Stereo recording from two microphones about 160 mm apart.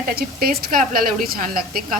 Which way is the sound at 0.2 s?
70° right (ahead or behind).